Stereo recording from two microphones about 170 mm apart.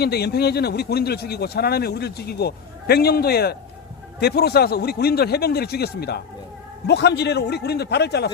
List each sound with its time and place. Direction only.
0.0 s speech: 70° left (ahead or behind)